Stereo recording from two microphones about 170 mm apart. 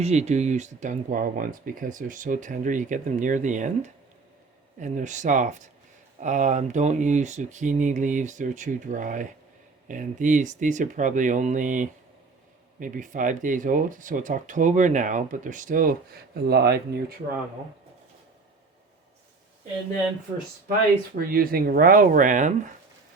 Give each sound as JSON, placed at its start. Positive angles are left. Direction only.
{"t": 0.0, "sound": "speech", "side_deg": -40}
{"t": 21.2, "sound": "speech", "side_deg": -60}